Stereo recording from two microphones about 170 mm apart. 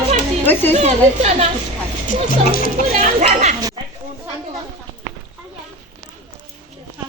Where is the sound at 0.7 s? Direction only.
40° right (ahead or behind).